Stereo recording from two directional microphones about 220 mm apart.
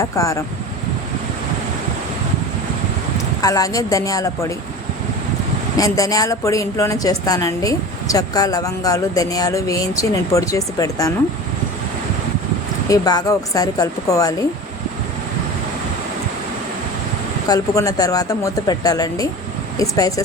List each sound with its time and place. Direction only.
0.0 s a woman's voice: 15° left (ahead or behind)
3.4 s a woman's voice: 15° left (ahead or behind)
5.7 s a woman's voice: 15° left (ahead or behind)
12.9 s a woman's voice: 15° left (ahead or behind)
17.5 s a woman's voice: 15° left (ahead or behind)